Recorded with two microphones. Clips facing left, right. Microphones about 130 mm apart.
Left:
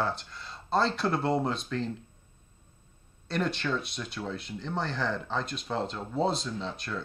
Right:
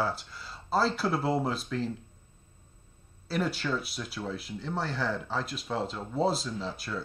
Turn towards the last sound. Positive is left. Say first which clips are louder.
# even
turn(degrees=-5)  # may be behind; listen again after turning